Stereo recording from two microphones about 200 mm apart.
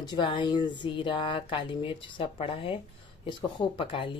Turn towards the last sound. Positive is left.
turn(degrees=25)  # may be behind; listen again after turning